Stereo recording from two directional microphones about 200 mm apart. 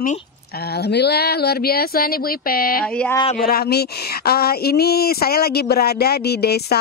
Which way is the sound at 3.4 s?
50° left (ahead or behind).